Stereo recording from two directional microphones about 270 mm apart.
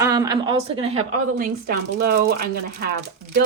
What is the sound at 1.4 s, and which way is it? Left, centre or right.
Speech, right.